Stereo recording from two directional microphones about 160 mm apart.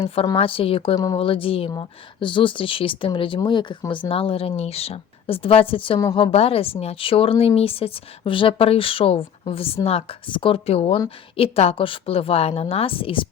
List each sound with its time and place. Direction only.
0.3 s a woman's voice: 35° left (ahead or behind)